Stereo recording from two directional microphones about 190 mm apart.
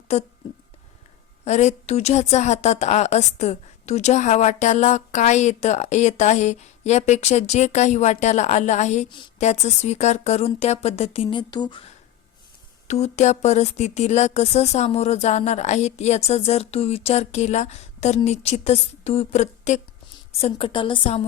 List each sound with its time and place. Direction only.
1.5 s a woman's voice: 35° left (ahead or behind)
12.9 s a woman's voice: 35° left (ahead or behind)